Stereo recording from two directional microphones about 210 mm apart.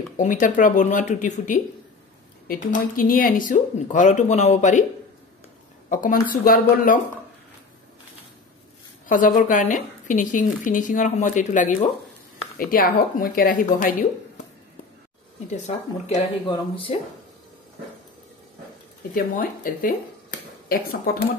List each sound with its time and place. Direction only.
0.2 s a woman's voice: 40° left (ahead or behind)
5.9 s speech: 40° left (ahead or behind)
9.0 s a woman's voice: 40° left (ahead or behind)
15.5 s speech: 30° left (ahead or behind)
19.1 s a woman's voice: 40° left (ahead or behind)